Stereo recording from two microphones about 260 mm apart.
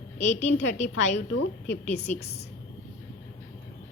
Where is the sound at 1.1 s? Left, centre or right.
Left.